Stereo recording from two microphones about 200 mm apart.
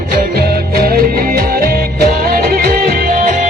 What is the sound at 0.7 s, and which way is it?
Music, 50° right (ahead or behind).